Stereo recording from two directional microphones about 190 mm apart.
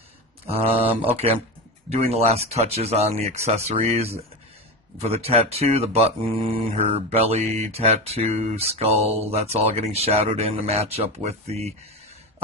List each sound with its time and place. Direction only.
0.5 s speech: 30° right (ahead or behind)